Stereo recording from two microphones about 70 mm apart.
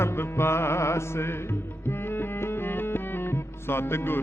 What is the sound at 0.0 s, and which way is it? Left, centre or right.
Music, left.